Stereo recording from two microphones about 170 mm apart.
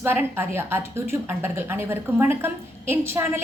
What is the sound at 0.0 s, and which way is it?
A woman's voice, 15° right (ahead or behind).